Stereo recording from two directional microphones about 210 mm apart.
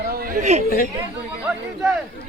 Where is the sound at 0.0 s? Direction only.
45° right (ahead or behind).